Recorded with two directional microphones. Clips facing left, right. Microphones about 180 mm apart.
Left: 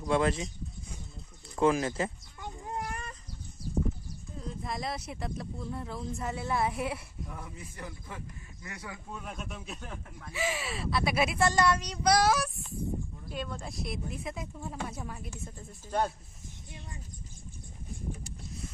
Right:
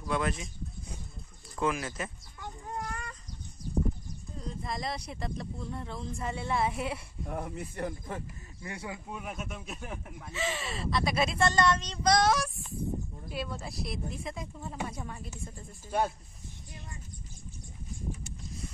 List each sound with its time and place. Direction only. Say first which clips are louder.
0.0 s speech: left 4 dB; 30° left (ahead or behind)
1.5 s speech: left 5 dB; 30° left (ahead or behind)
2.4 s a sound: left 1 dB; 20° left (ahead or behind)
4.4 s speech: even; centre (ahead or behind)
7.2 s speech: right 11 dB; 60° right (ahead or behind)
8.6 s a man's voice: right 4 dB; 25° right (ahead or behind)
9.2 s speech: right 2 dB; 5° right (ahead or behind)
10.3 s speech: left 1 dB; 10° left (ahead or behind)
13.3 s speech: right 1 dB; 5° right (ahead or behind)
15.9 s speech: even; 10° right (ahead or behind)